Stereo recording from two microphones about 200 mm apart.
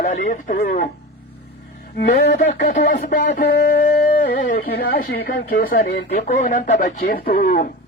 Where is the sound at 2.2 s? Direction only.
50° left (ahead or behind).